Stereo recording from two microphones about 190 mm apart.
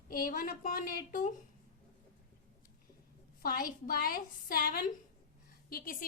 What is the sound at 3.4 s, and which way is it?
A woman's voice, 50° left (ahead or behind).